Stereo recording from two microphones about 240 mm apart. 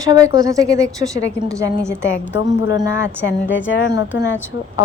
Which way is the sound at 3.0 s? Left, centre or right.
Left.